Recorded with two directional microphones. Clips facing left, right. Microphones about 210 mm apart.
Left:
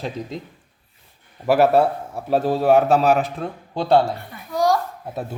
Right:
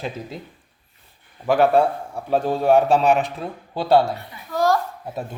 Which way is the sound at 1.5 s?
5° left (ahead or behind).